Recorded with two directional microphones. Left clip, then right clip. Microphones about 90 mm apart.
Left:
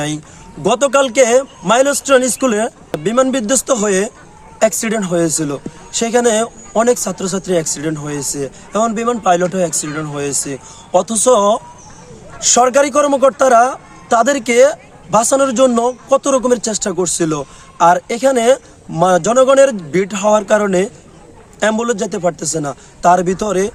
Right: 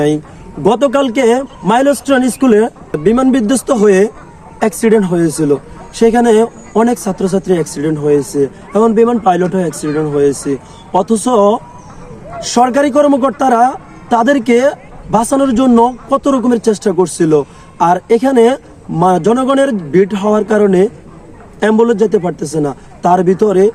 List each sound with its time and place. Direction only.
0.6 s a man's voice: 30° left (ahead or behind)